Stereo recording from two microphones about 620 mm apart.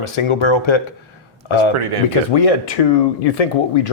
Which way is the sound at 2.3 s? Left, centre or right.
Left.